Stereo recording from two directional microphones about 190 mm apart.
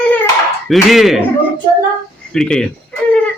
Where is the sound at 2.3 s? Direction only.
5° left (ahead or behind).